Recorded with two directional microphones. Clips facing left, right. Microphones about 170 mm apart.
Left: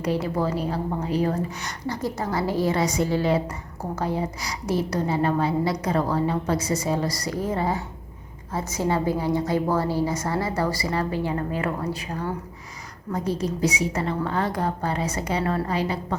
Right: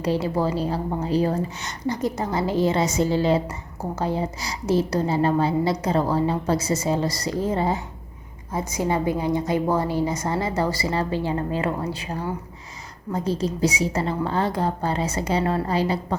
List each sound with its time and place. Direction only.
0.0 s a woman's voice: 30° right (ahead or behind)
8.5 s a woman's voice: 15° right (ahead or behind)
13.1 s a woman's voice: 30° right (ahead or behind)